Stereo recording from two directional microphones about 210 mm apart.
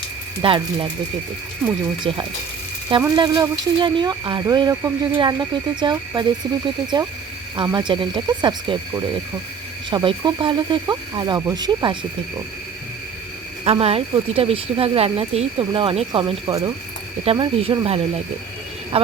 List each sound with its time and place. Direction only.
0.4 s speech: 25° right (ahead or behind)
2.0 s speech: 25° right (ahead or behind)
9.9 s speech: 25° right (ahead or behind)
13.7 s speech: 30° right (ahead or behind)